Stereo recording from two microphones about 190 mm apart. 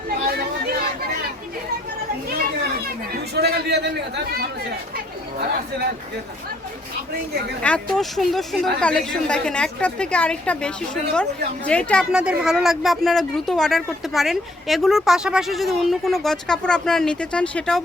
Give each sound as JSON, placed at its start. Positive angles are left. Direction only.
{"t": 0.1, "sound": "chatter", "side_deg": -55}
{"t": 2.4, "sound": "children playing", "side_deg": -55}
{"t": 3.3, "sound": "a man's voice", "side_deg": -60}
{"t": 7.6, "sound": "speech", "side_deg": 5}
{"t": 12.1, "sound": "speech", "side_deg": -5}